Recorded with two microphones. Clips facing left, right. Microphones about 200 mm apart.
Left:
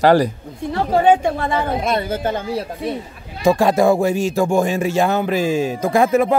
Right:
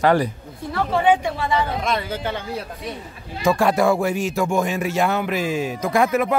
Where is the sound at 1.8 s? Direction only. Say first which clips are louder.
Left 4 dB; 40° left (ahead or behind).